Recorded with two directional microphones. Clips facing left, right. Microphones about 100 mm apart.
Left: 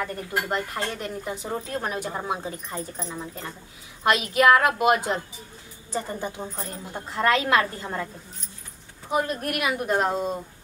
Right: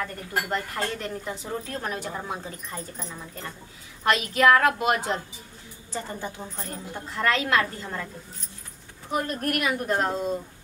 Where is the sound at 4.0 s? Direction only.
15° left (ahead or behind).